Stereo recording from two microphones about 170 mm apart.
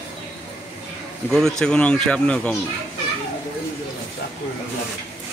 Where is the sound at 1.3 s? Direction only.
5° left (ahead or behind).